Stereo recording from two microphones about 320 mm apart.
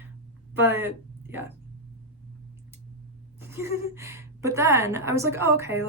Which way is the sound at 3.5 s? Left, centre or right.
Centre.